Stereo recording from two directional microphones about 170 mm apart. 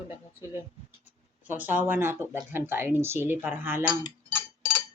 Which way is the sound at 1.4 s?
10° right (ahead or behind).